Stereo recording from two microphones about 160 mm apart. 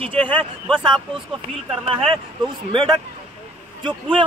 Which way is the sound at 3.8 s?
30° right (ahead or behind).